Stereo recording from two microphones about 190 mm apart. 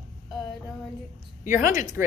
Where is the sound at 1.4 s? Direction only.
45° left (ahead or behind).